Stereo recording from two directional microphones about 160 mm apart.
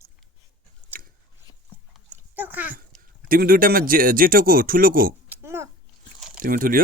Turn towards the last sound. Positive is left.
turn(degrees=-60)  # may be behind; listen again after turning